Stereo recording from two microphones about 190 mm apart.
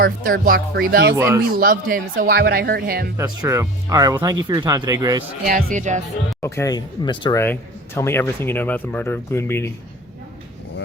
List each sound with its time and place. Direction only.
0.0 s speech: 50° right (ahead or behind)
1.1 s speech: 15° right (ahead or behind)
1.5 s speech: 50° right (ahead or behind)
3.2 s speech: 15° right (ahead or behind)
5.5 s speech: 50° right (ahead or behind)
6.4 s speech: 15° left (ahead or behind)
7.4 s speech: 10° left (ahead or behind)